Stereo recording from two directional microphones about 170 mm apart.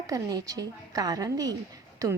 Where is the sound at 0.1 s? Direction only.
20° right (ahead or behind).